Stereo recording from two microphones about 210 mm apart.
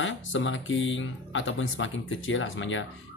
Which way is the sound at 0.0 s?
65° left (ahead or behind).